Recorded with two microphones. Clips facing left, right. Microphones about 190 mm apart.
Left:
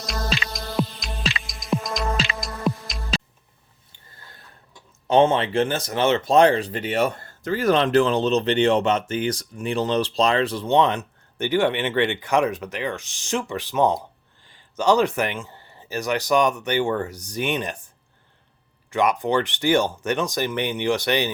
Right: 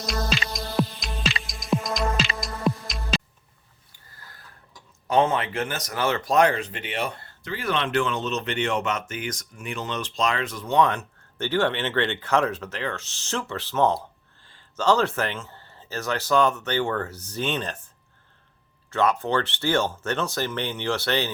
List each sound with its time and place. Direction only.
0.0 s music: centre (ahead or behind)
3.9 s a sound: 25° left (ahead or behind)
5.0 s speech: 25° left (ahead or behind)
18.9 s speech: 15° left (ahead or behind)